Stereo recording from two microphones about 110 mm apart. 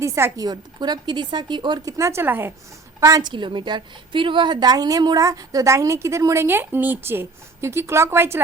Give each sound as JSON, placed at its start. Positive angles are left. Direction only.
{"t": 0.0, "sound": "speech", "side_deg": -25}
{"t": 0.4, "sound": "speech", "side_deg": -40}
{"t": 1.8, "sound": "speech", "side_deg": -30}
{"t": 3.0, "sound": "a woman's voice", "side_deg": -35}